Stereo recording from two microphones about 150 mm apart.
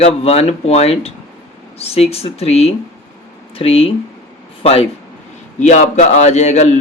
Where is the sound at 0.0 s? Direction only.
45° left (ahead or behind).